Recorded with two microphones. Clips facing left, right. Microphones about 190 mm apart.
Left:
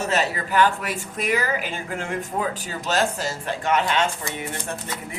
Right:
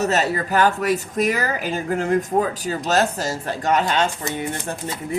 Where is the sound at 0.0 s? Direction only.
40° right (ahead or behind).